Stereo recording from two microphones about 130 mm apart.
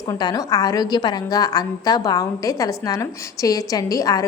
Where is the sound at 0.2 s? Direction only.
30° left (ahead or behind).